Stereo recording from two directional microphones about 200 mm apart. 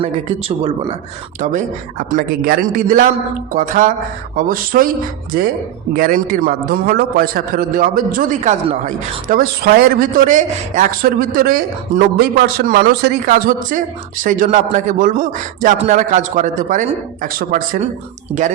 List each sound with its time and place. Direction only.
0.0 s speech: 30° right (ahead or behind)
1.4 s a man's voice: 40° right (ahead or behind)